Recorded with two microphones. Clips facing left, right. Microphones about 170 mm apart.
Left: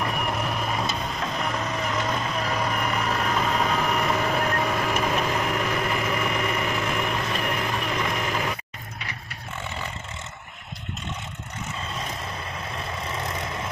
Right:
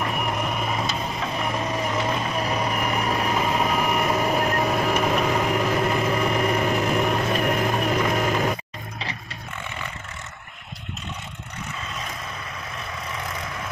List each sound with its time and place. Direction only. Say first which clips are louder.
0.0 s vehicle: right 1 dB; centre (ahead or behind); by 8.5 s 40° right (ahead or behind)